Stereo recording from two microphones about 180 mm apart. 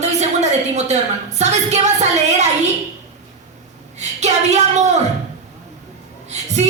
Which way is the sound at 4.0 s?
40° right (ahead or behind).